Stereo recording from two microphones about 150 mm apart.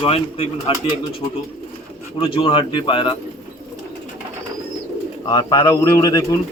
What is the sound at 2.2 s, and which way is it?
Speech, 35° left (ahead or behind).